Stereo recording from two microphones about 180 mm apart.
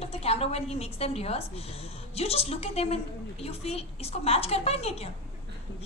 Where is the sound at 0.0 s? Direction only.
35° left (ahead or behind).